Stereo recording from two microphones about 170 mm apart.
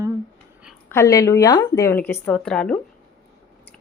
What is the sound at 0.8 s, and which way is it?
A woman's voice, 15° left (ahead or behind).